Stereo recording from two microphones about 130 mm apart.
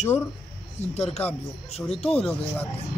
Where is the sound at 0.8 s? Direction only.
55° left (ahead or behind).